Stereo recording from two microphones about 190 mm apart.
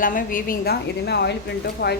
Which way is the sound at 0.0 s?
45° left (ahead or behind).